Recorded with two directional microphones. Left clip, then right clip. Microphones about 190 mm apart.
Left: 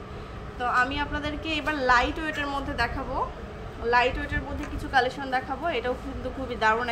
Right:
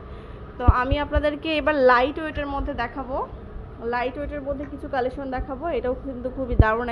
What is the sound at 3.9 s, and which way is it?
A woman's voice, 50° right (ahead or behind).